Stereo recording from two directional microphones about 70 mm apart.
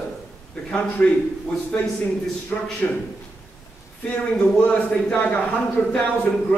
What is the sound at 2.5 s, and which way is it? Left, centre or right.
Speech, centre.